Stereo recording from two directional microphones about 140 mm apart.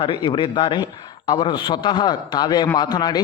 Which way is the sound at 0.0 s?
35° left (ahead or behind).